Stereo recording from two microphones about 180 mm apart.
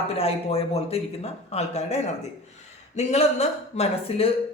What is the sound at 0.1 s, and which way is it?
Speech, 35° left (ahead or behind).